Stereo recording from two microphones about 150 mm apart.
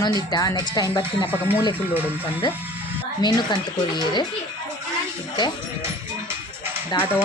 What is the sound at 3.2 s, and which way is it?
A woman's voice, 30° left (ahead or behind).